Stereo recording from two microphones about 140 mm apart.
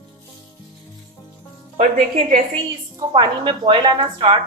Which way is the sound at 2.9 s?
35° right (ahead or behind).